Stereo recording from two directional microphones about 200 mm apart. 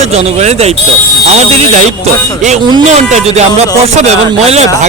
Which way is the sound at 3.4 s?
35° right (ahead or behind).